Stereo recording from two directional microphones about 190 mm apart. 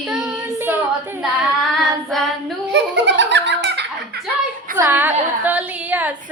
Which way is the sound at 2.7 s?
70° right (ahead or behind).